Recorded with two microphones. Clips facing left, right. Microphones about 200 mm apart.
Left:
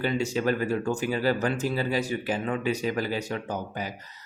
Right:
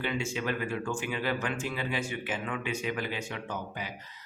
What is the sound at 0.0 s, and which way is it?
Speech, 40° left (ahead or behind).